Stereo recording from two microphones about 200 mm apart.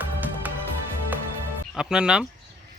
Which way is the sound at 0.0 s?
10° right (ahead or behind).